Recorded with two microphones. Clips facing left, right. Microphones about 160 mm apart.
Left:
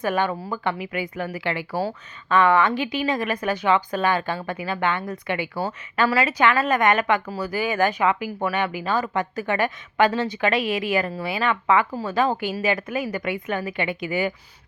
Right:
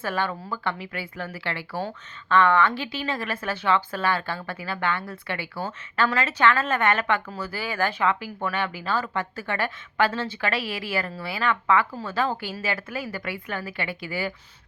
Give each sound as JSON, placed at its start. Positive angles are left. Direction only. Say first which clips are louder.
{"t": 0.0, "sound": "a woman's voice", "louder": "left 5 dB", "side_deg": 15}